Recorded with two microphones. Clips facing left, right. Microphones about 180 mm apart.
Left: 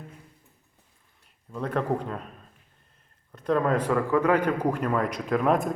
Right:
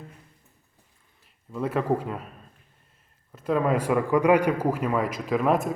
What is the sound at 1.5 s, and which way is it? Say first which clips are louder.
Speech: right 2 dB; 5° right (ahead or behind).